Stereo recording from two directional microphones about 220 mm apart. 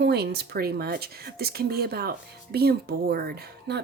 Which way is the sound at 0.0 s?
45° right (ahead or behind).